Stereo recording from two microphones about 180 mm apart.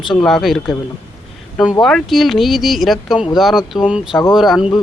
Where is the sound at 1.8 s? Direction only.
Centre (ahead or behind).